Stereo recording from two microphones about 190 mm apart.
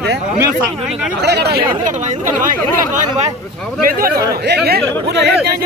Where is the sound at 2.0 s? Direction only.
45° right (ahead or behind).